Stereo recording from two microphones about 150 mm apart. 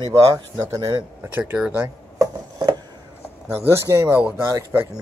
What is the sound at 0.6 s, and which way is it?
Speech, 25° right (ahead or behind).